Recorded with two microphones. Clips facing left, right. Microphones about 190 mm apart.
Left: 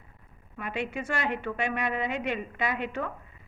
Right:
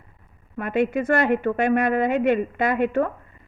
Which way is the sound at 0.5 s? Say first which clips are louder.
Right 11 dB; 50° right (ahead or behind).